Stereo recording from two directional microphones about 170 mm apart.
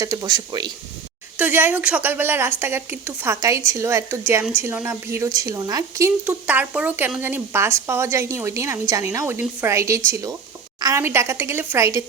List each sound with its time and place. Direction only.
0.0 s speech: 20° right (ahead or behind)
1.4 s a woman's voice: 10° right (ahead or behind)
6.2 s a woman's voice: 10° right (ahead or behind)